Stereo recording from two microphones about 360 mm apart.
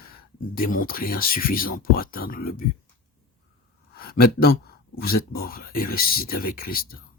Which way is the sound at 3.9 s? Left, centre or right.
Left.